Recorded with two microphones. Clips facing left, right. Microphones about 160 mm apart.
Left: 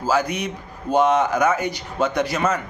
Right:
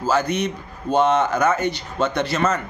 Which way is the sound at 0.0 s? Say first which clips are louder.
Right 1 dB; 10° left (ahead or behind).